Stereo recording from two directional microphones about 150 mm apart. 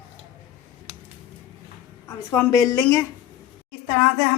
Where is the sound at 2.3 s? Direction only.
20° left (ahead or behind).